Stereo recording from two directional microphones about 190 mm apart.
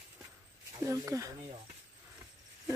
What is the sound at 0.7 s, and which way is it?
Speech, 15° right (ahead or behind).